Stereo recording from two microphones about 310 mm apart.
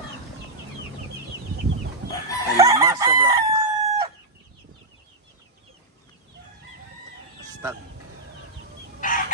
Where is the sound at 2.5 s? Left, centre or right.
Centre.